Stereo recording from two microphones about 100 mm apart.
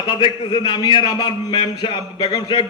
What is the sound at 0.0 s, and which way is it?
A man's voice, 50° left (ahead or behind).